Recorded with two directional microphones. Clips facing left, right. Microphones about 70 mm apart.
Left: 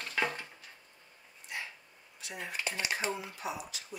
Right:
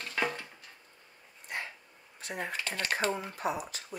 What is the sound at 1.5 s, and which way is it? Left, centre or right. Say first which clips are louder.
Dog: right 3 dB; right.